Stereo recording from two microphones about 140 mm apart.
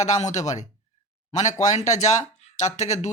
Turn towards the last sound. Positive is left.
turn(degrees=55)  # may be behind; listen again after turning